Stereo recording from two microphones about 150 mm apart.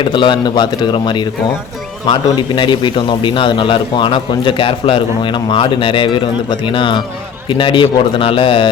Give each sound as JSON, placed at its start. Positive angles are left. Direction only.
{"t": 0.0, "sound": "a man's voice", "side_deg": 30}
{"t": 2.6, "sound": "a man's voice", "side_deg": 30}